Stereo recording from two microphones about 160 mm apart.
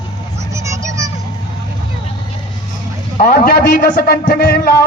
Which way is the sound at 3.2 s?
70° left (ahead or behind).